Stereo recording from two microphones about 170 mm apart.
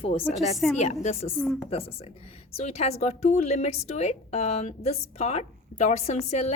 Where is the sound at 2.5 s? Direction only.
40° left (ahead or behind).